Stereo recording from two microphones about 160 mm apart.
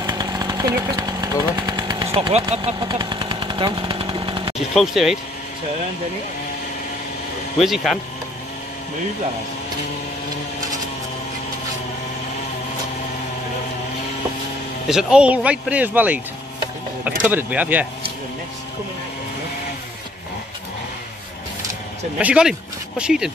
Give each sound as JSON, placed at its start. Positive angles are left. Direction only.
{"t": 0.0, "sound": "chainsaw", "side_deg": -25}
{"t": 4.6, "sound": "speech", "side_deg": 0}
{"t": 7.5, "sound": "speech", "side_deg": 0}
{"t": 14.9, "sound": "speech", "side_deg": -5}
{"t": 22.2, "sound": "speech", "side_deg": -5}